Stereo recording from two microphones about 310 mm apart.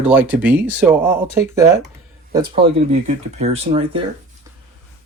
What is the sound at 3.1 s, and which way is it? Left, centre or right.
Speech, centre.